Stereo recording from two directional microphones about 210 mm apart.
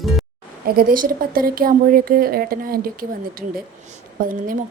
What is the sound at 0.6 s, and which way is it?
A woman's voice, 45° right (ahead or behind).